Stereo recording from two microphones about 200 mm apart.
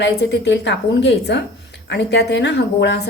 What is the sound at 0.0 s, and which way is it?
Speech, 60° left (ahead or behind).